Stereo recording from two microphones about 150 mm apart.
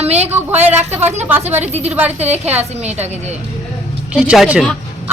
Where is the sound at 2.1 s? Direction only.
45° right (ahead or behind).